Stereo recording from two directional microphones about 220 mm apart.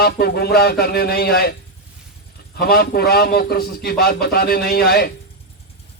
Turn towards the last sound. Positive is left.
turn(degrees=45)  # may be behind; listen again after turning